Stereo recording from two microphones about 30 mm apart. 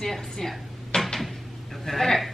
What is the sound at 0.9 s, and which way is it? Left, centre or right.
Cupboard open or close, centre.